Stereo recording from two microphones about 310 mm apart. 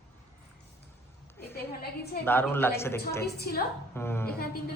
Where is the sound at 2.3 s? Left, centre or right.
Centre.